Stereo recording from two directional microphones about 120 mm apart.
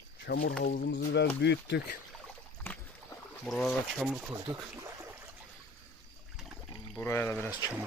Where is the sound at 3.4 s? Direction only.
5° left (ahead or behind).